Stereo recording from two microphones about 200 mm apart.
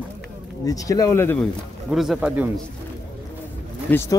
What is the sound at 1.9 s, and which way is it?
Speech, centre (ahead or behind).